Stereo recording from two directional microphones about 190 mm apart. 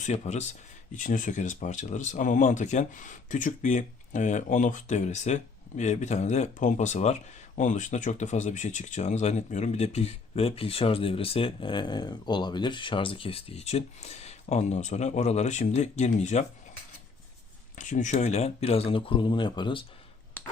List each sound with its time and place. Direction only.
0.0 s speech: 35° left (ahead or behind)
17.7 s speech: 40° left (ahead or behind); by 19.8 s 25° left (ahead or behind)